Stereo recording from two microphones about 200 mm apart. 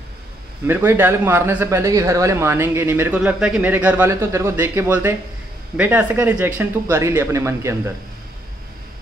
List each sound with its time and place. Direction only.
0.7 s a man's voice: 10° right (ahead or behind)